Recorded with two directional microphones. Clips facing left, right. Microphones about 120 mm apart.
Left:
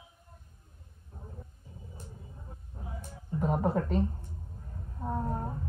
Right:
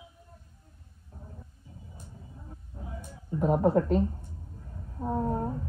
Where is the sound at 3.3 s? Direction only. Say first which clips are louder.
Right 5 dB; centre (ahead or behind).